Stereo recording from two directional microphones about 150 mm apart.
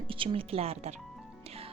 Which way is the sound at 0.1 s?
35° right (ahead or behind).